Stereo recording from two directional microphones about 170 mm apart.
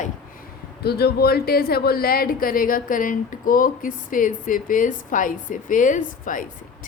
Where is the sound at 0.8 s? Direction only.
70° left (ahead or behind).